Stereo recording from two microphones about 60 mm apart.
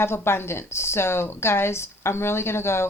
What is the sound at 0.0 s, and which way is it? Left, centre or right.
A woman's voice, left.